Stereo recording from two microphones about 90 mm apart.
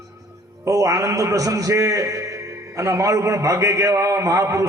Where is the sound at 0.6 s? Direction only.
40° right (ahead or behind).